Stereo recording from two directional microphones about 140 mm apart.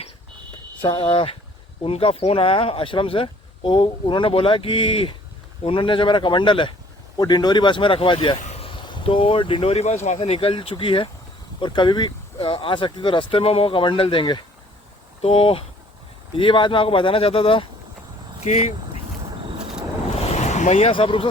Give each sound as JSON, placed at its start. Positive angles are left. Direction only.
{"t": 0.8, "sound": "speech", "side_deg": 35}
{"t": 15.2, "sound": "speech", "side_deg": 45}
{"t": 20.1, "sound": "vehicle", "side_deg": 55}
{"t": 20.9, "sound": "speech", "side_deg": 40}